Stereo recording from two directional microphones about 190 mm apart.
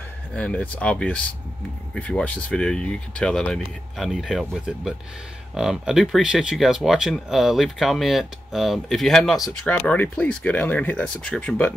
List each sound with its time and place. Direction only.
0.4 s speech: 5° left (ahead or behind)